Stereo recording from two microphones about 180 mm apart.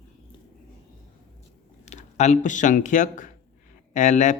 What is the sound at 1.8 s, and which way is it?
Speech, 40° left (ahead or behind).